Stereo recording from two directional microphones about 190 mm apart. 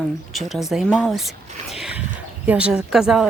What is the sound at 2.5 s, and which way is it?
Speech, 5° right (ahead or behind).